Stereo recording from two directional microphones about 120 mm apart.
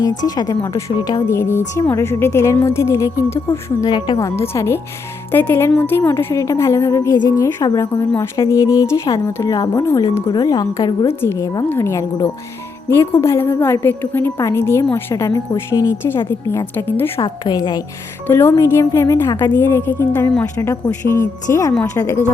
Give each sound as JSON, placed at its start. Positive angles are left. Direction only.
{"t": 0.0, "sound": "a woman's voice", "side_deg": 35}
{"t": 1.3, "sound": "a woman's voice", "side_deg": 20}
{"t": 3.9, "sound": "speech", "side_deg": 40}
{"t": 4.2, "sound": "a woman's voice", "side_deg": 25}
{"t": 10.2, "sound": "a woman's voice", "side_deg": 35}
{"t": 17.2, "sound": "speech", "side_deg": 40}
{"t": 18.3, "sound": "a woman's voice", "side_deg": 20}